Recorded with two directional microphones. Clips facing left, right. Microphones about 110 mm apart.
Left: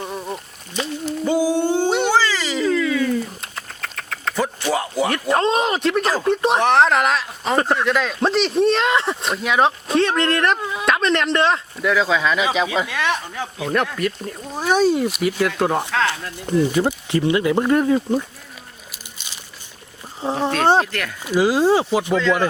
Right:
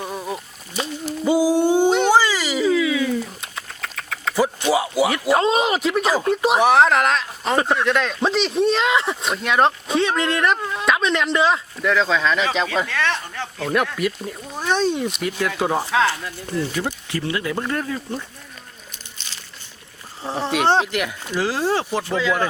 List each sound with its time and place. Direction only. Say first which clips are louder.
0.0 s a sound: even; centre (ahead or behind)
4.7 s speech: even; 10° right (ahead or behind); by 13.7 s 15° left (ahead or behind)
13.7 s speech: even; centre (ahead or behind)
14.5 s speech: left 4 dB; 10° left (ahead or behind)
16.5 s speech: left 7 dB; 20° left (ahead or behind)
20.2 s speech: left 4 dB; 15° left (ahead or behind)
20.8 s speech: right 3 dB; 15° right (ahead or behind)
21.2 s speech: left 8 dB; 15° left (ahead or behind)
22.1 s speech: left 2 dB; centre (ahead or behind)